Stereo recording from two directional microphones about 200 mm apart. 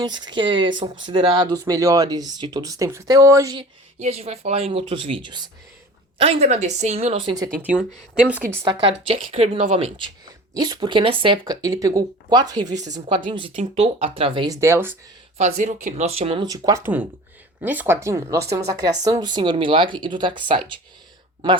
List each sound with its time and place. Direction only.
0.0 s speech: 20° right (ahead or behind)
4.0 s speech: 30° right (ahead or behind)
7.3 s speech: 15° right (ahead or behind)
7.7 s speech: 5° right (ahead or behind)
9.0 s speech: 30° right (ahead or behind); by 14.9 s 10° right (ahead or behind)
15.4 s speech: 35° right (ahead or behind)